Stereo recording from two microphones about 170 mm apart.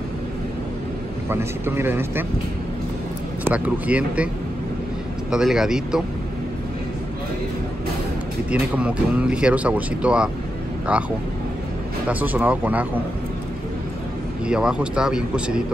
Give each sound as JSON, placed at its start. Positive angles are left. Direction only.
{"t": 1.3, "sound": "speech", "side_deg": -15}
{"t": 3.4, "sound": "speech", "side_deg": -10}
{"t": 5.3, "sound": "speech", "side_deg": 0}
{"t": 8.5, "sound": "speech", "side_deg": -5}
{"t": 12.1, "sound": "speech", "side_deg": -10}
{"t": 14.5, "sound": "speech", "side_deg": -5}